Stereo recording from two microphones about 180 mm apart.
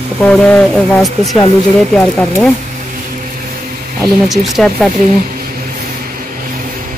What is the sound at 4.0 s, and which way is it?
Speech, centre (ahead or behind).